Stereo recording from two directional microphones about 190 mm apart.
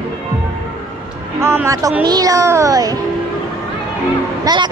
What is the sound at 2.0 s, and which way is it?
Music, 20° right (ahead or behind).